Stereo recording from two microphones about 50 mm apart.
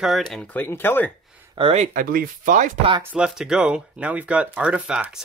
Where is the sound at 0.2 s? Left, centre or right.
Centre.